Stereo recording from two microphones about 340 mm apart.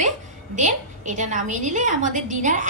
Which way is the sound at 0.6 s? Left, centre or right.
Right.